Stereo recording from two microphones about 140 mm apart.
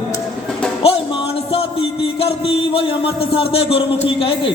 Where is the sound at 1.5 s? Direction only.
40° left (ahead or behind).